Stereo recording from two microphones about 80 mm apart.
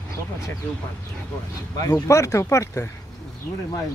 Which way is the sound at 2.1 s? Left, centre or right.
Left.